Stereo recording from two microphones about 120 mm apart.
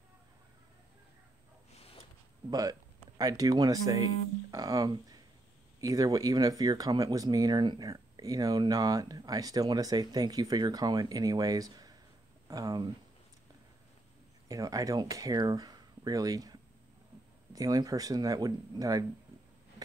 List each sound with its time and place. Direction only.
2.5 s speech: 30° right (ahead or behind)
14.5 s speech: 30° right (ahead or behind)